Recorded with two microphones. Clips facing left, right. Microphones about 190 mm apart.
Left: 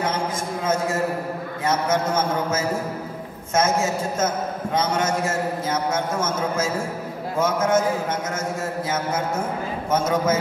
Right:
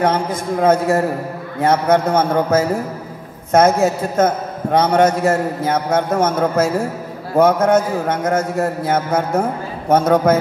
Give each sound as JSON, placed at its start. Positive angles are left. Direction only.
{"t": 0.0, "sound": "a man's voice", "side_deg": -60}